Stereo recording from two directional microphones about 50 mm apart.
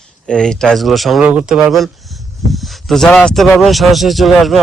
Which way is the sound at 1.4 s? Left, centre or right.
Centre.